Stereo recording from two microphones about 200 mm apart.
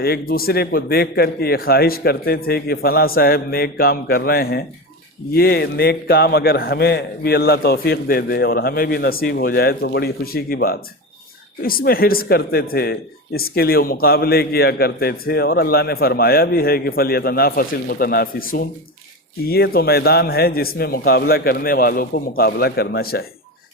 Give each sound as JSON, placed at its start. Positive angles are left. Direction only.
{"t": 0.0, "sound": "a man's voice", "side_deg": 50}